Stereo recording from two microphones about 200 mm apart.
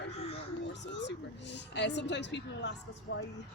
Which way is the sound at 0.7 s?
60° left (ahead or behind).